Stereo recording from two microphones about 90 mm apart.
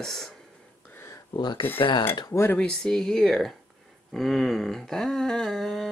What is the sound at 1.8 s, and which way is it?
Speech, 70° left (ahead or behind).